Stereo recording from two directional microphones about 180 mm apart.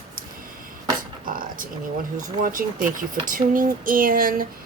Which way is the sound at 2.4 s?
45° right (ahead or behind).